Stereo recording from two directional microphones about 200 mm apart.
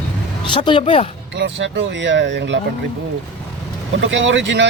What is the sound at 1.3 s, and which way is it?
Speech, 60° right (ahead or behind).